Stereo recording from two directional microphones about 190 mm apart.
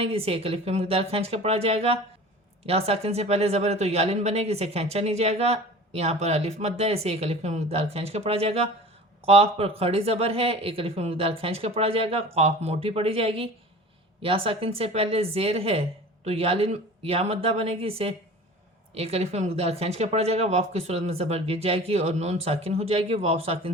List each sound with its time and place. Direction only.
0.0 s speech: 30° right (ahead or behind)